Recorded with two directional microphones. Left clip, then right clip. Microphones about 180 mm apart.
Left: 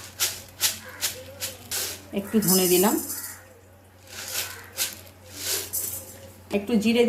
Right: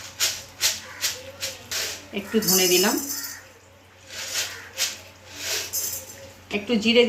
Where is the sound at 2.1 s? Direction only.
55° left (ahead or behind).